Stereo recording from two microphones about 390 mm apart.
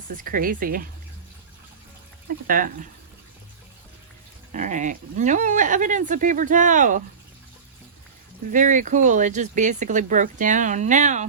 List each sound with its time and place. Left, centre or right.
0.1 s speech: right
2.5 s speech: right
4.5 s speech: centre
8.4 s speech: centre